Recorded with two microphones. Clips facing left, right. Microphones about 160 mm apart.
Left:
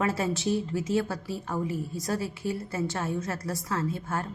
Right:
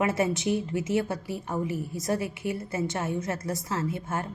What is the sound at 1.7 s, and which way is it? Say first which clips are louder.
Speech: even; 25° left (ahead or behind).